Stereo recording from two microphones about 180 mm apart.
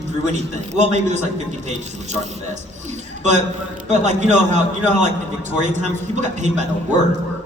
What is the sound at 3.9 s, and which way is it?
A man's voice, 40° right (ahead or behind).